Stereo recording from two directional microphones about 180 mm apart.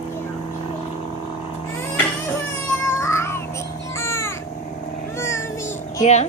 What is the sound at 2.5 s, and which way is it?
Music, 15° left (ahead or behind).